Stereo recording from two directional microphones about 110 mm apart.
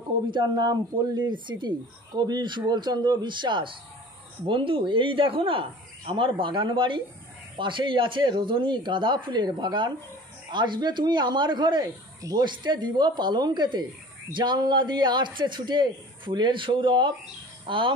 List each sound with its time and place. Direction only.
0.3 s a man's voice: 40° right (ahead or behind)